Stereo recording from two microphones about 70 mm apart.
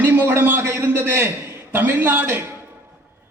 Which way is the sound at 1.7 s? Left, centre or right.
Right.